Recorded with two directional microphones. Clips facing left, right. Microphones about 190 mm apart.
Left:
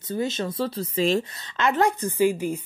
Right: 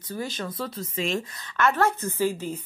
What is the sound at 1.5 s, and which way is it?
A woman's voice, 15° left (ahead or behind).